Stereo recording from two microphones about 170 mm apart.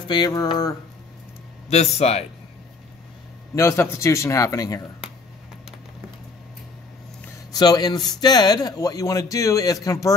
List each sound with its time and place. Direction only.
0.1 s speech: 25° left (ahead or behind)
1.7 s speech: 40° left (ahead or behind)
3.5 s a man's voice: 15° left (ahead or behind)
7.5 s speech: 25° left (ahead or behind)